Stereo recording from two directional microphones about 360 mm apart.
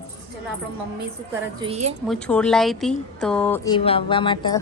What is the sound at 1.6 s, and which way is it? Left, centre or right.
Speech, centre.